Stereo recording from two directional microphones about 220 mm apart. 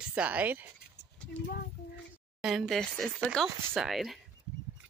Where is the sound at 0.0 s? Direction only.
5° right (ahead or behind).